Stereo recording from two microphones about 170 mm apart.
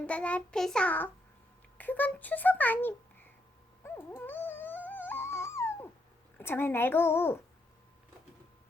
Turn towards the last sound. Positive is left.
turn(degrees=15)  # may be behind; listen again after turning